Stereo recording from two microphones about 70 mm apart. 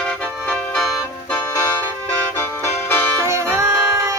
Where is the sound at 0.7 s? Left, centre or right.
Centre.